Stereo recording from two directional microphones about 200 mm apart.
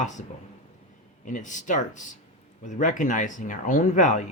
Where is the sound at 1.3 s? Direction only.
40° left (ahead or behind).